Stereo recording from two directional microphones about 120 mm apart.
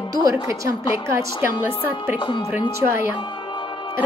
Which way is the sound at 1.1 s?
20° right (ahead or behind).